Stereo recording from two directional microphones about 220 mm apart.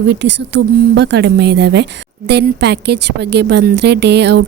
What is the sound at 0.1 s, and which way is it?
Speech, 50° right (ahead or behind).